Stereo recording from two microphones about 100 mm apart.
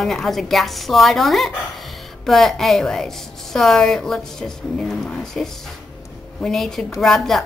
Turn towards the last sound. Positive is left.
turn(degrees=0)  # may be behind; listen again after turning